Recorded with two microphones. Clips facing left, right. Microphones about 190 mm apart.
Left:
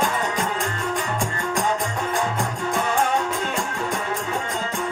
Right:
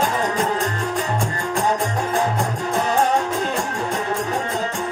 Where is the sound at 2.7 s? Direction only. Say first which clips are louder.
Right 3 dB; 35° right (ahead or behind).